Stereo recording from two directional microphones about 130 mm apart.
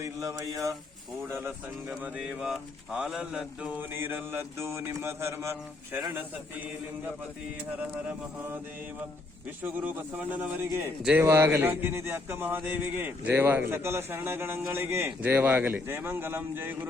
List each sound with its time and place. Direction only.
0.0 s a sound: 25° right (ahead or behind)
1.3 s speech: 15° right (ahead or behind)
9.6 s speech: 15° right (ahead or behind)